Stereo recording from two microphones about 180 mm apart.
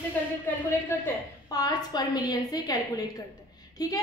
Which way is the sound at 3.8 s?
20° left (ahead or behind).